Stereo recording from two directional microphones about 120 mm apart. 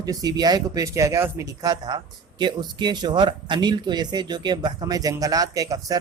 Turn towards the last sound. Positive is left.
turn(degrees=-30)  # may be behind; listen again after turning